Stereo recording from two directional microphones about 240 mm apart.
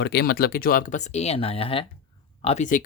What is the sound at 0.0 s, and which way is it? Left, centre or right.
Speech, left.